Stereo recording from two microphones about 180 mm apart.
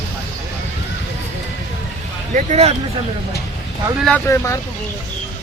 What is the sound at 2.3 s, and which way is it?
Speech, 40° right (ahead or behind).